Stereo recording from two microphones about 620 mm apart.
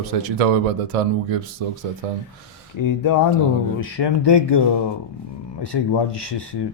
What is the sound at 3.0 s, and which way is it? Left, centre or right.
Speech, left.